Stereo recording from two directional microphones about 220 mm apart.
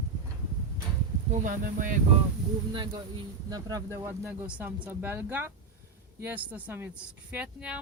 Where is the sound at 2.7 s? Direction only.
20° right (ahead or behind).